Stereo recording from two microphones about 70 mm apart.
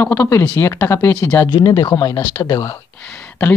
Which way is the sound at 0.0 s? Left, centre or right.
Left.